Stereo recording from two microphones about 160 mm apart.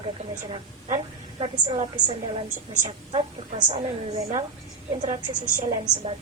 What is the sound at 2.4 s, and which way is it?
A woman's voice, 50° right (ahead or behind).